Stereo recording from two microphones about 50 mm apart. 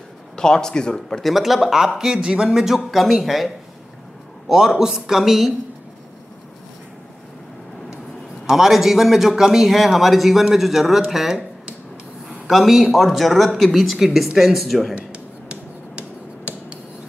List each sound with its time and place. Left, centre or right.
0.4 s speech: centre
1.2 s a man's voice: centre
2.2 s speech: centre
2.6 s a man's voice: centre
8.5 s speech: centre
12.4 s speech: centre
15.0 s a sound: right